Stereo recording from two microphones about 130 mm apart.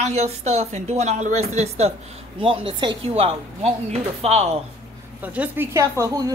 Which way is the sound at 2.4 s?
45° right (ahead or behind).